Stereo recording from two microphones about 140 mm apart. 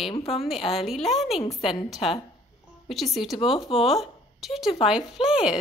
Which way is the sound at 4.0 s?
Centre (ahead or behind).